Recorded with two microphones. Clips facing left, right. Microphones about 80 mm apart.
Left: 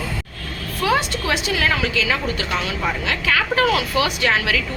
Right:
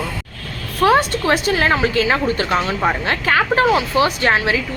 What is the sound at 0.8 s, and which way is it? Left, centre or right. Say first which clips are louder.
Speech: right 6 dB; right.